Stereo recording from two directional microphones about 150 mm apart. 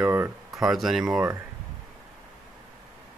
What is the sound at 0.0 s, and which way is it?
Speech, 15° right (ahead or behind).